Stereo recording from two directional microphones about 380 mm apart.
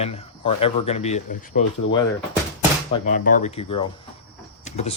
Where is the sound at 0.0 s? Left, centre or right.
Centre.